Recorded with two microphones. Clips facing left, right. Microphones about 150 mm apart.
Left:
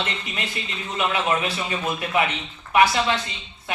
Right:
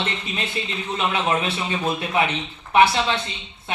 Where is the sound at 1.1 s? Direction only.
25° right (ahead or behind).